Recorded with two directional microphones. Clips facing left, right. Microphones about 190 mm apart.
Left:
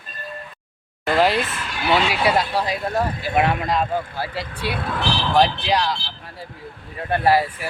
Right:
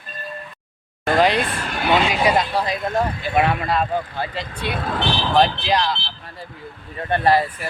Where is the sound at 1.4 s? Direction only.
50° right (ahead or behind).